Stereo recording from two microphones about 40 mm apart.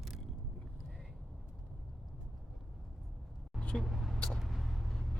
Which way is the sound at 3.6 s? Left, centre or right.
Left.